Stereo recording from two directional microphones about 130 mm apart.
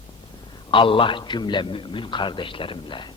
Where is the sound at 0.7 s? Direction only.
40° left (ahead or behind).